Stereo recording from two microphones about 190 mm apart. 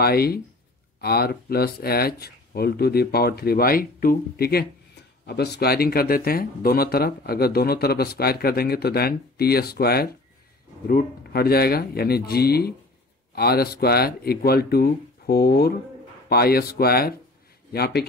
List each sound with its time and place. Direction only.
0.0 s speech: 55° left (ahead or behind)